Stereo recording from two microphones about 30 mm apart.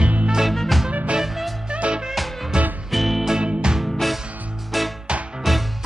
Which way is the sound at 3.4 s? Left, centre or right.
Right.